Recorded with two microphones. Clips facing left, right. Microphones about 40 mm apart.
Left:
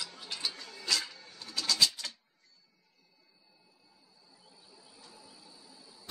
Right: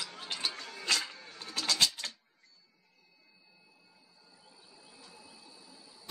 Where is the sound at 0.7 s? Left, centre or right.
Right.